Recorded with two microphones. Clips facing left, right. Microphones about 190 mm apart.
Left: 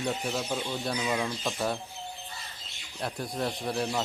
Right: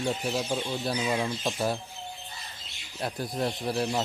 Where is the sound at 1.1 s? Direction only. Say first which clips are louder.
Right 1 dB; 20° right (ahead or behind).